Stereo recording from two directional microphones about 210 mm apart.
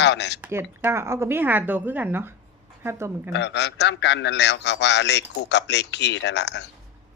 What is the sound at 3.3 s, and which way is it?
A man's voice, 55° left (ahead or behind).